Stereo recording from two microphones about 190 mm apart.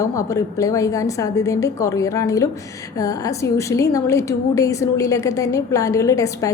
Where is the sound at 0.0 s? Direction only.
15° left (ahead or behind).